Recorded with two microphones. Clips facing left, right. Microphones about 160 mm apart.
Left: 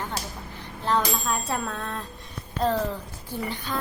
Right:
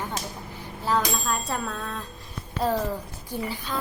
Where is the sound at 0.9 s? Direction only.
5° right (ahead or behind).